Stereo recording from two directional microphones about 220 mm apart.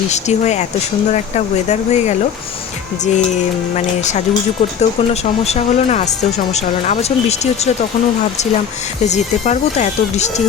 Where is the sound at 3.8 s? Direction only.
30° left (ahead or behind).